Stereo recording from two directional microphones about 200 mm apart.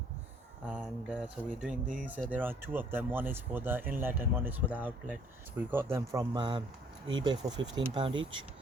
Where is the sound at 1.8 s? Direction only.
40° right (ahead or behind).